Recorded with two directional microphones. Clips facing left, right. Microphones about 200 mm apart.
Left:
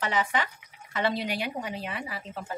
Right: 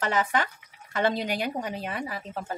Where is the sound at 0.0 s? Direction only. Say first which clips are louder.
Right 2 dB; 45° right (ahead or behind).